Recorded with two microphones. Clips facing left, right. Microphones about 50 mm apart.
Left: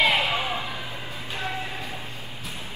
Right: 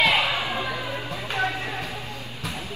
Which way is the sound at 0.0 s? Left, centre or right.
Right.